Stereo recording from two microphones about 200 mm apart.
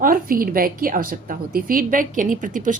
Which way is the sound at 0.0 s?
45° right (ahead or behind).